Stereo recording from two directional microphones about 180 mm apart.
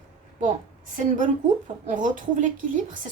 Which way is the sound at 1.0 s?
45° right (ahead or behind).